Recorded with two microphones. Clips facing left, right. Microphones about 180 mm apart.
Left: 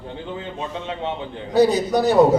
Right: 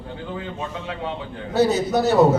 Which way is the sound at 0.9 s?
25° left (ahead or behind).